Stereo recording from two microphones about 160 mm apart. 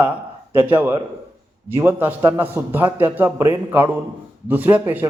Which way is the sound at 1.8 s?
15° right (ahead or behind).